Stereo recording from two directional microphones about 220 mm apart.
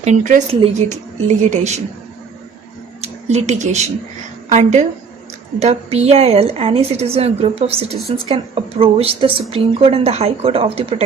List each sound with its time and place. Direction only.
0.0 s a woman's voice: 35° right (ahead or behind)
3.0 s a woman's voice: 30° right (ahead or behind)